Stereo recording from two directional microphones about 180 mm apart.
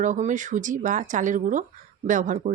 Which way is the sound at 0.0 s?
45° right (ahead or behind).